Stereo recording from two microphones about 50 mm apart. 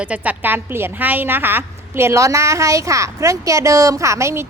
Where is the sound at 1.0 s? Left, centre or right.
Right.